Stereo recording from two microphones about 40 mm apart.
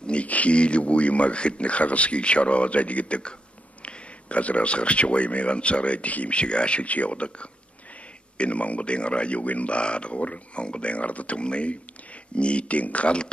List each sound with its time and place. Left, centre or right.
0.0 s speech: left